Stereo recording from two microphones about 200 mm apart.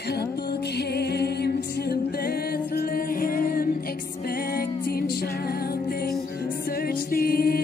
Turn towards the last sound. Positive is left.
turn(degrees=50)  # may be behind; listen again after turning